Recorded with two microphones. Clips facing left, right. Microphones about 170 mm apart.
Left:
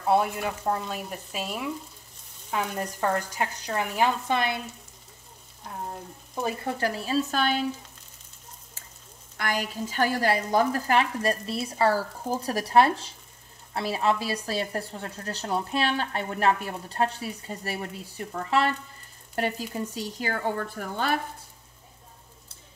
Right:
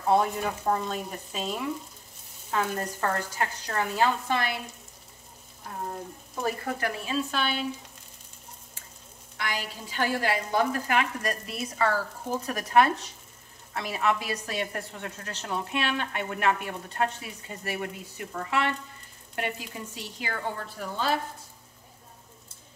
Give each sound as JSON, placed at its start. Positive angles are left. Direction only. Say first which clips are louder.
{"t": 0.1, "sound": "speech", "louder": "even", "side_deg": 5}
{"t": 2.5, "sound": "speech", "louder": "right 1 dB", "side_deg": 15}
{"t": 6.4, "sound": "a woman's voice", "louder": "left 1 dB", "side_deg": 30}
{"t": 9.4, "sound": "a woman's voice", "louder": "left 5 dB", "side_deg": 45}